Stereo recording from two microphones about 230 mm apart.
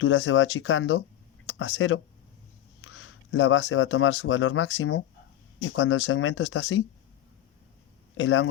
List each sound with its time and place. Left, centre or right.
0.0 s speech: left
8.1 s speech: left